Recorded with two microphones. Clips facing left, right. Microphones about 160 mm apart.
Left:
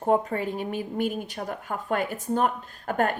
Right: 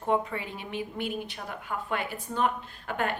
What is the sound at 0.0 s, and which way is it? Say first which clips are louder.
Speech: left 5 dB; 40° left (ahead or behind).